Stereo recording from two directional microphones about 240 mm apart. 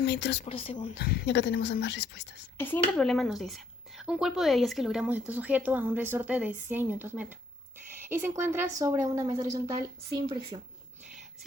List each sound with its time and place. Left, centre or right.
0.0 s speech: left
0.4 s speech: left
0.9 s speech: left
2.6 s a woman's voice: centre